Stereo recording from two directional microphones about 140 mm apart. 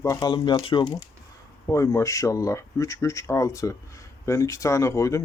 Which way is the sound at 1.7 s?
20° left (ahead or behind).